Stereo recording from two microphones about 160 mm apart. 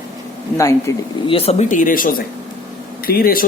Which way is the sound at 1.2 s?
40° left (ahead or behind).